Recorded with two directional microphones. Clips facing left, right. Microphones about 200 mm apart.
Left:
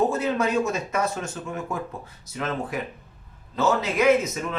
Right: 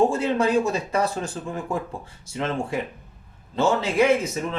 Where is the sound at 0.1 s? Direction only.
30° right (ahead or behind).